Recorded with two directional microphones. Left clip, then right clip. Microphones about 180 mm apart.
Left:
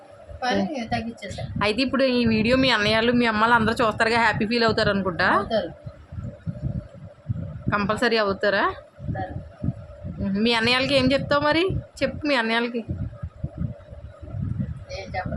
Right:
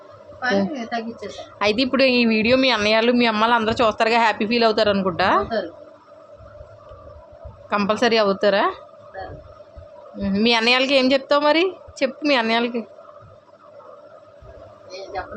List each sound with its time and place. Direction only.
0.4 s a woman's voice: 30° left (ahead or behind)
1.3 s a woman's voice: 5° left (ahead or behind)
7.7 s a woman's voice: centre (ahead or behind)
10.2 s a woman's voice: centre (ahead or behind)